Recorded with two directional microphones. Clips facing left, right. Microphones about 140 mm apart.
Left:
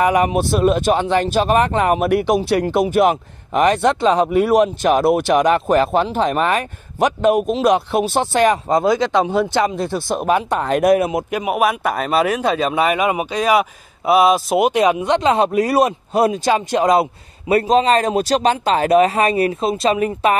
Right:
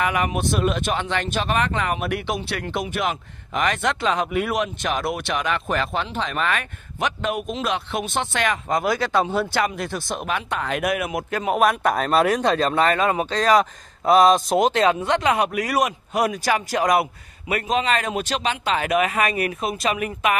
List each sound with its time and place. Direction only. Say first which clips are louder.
0.0 s speech: left 7 dB; 35° left (ahead or behind)
11.2 s speech: left 2 dB; 10° left (ahead or behind); by 20.3 s 30° left (ahead or behind)